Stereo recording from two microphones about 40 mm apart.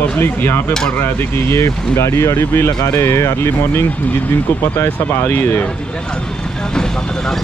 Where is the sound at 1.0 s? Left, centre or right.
Left.